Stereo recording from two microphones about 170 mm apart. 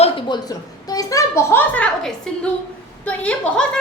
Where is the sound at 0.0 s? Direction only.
30° left (ahead or behind).